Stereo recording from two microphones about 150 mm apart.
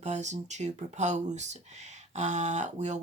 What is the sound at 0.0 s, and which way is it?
Speech, 50° right (ahead or behind).